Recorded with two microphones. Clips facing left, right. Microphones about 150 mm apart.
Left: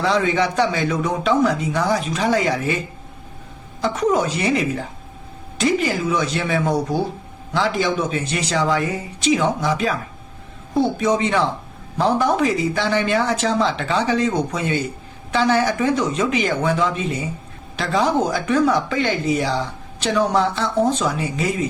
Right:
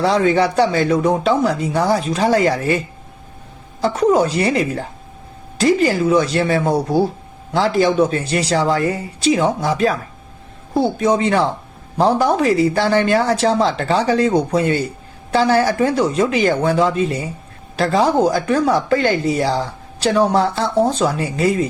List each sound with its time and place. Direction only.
0.0 s speech: 35° right (ahead or behind)
3.8 s speech: 30° right (ahead or behind)
11.0 s speech: 30° right (ahead or behind)